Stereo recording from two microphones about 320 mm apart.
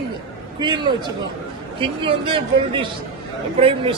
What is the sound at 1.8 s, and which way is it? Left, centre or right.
A man's voice, centre.